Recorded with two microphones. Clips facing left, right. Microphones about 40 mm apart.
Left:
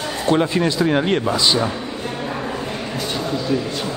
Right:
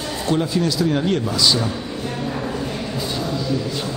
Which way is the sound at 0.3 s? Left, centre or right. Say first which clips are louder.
Left 3 dB; left.